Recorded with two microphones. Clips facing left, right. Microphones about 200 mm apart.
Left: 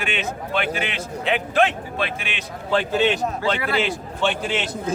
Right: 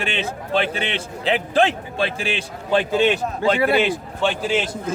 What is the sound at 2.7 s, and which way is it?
Speech, 15° right (ahead or behind).